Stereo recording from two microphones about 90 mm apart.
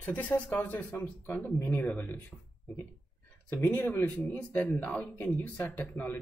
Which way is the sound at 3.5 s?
20° left (ahead or behind).